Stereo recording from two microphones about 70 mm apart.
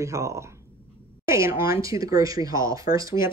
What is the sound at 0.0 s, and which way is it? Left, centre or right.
Speech, right.